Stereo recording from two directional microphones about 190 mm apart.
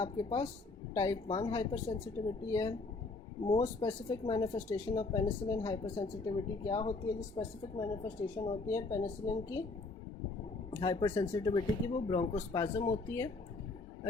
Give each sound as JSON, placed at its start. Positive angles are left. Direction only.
{"t": 0.0, "sound": "speech", "side_deg": 20}
{"t": 10.8, "sound": "speech", "side_deg": 20}